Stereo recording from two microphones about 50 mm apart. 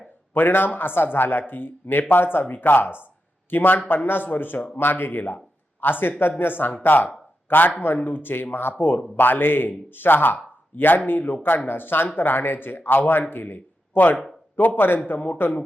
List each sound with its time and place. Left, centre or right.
0.3 s speech: left